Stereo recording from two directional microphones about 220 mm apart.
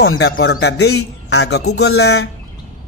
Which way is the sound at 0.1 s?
60° left (ahead or behind).